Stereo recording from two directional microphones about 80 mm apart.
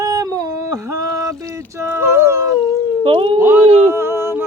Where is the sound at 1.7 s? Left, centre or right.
Right.